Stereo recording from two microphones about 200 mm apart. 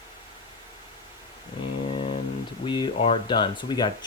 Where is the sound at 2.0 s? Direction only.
30° left (ahead or behind).